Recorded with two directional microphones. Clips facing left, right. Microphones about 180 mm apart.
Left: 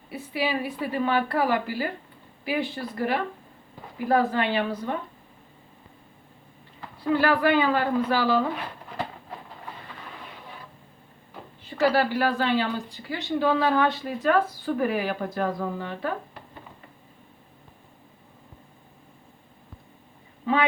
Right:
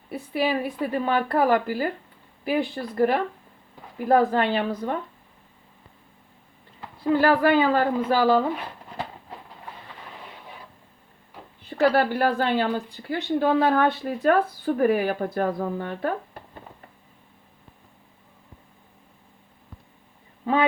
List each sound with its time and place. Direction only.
0.1 s speech: 50° right (ahead or behind)
7.1 s speech: 40° right (ahead or behind)
11.8 s speech: 50° right (ahead or behind)